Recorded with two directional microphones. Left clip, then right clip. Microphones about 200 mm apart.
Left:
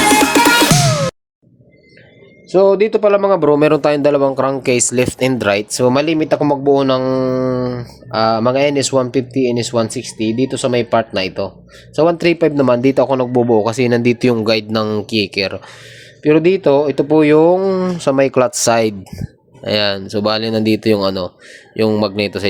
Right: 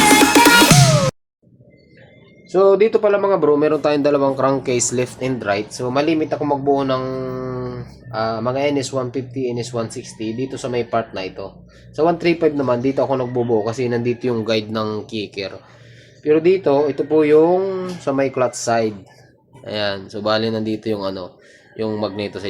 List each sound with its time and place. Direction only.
0.1 s music: centre (ahead or behind)
2.5 s speech: 45° left (ahead or behind)
14.3 s speech: 40° left (ahead or behind)
16.2 s speech: 55° left (ahead or behind)
19.6 s speech: 40° left (ahead or behind)